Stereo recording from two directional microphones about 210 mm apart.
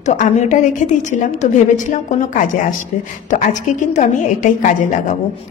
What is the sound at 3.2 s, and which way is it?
A woman's voice, 35° left (ahead or behind).